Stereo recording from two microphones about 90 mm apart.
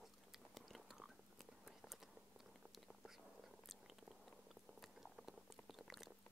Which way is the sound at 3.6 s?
Centre (ahead or behind).